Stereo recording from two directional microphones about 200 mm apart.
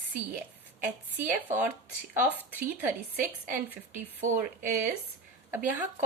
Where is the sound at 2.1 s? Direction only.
10° right (ahead or behind).